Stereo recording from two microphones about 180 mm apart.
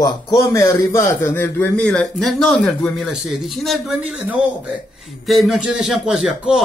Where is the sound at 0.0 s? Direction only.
20° left (ahead or behind).